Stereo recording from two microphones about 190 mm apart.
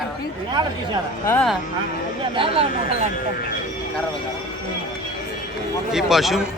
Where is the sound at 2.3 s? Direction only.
30° right (ahead or behind).